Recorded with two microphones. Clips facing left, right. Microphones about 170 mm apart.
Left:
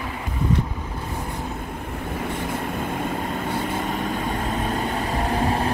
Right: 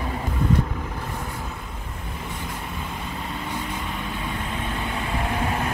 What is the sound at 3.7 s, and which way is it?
Vehicle, 45° left (ahead or behind).